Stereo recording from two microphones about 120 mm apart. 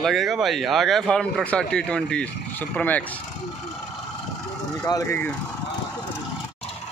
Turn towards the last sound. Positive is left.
turn(degrees=30)  # may be behind; listen again after turning